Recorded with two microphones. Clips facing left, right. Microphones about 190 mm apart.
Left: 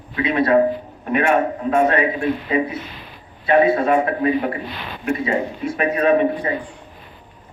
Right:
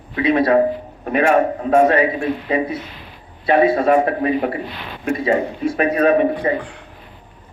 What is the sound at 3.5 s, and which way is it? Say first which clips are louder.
Speech: right 1 dB; 35° right (ahead or behind).